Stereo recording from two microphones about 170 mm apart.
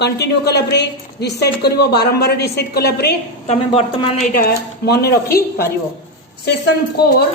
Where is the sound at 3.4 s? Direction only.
35° left (ahead or behind).